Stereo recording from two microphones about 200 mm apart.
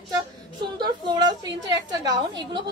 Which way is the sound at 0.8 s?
20° right (ahead or behind).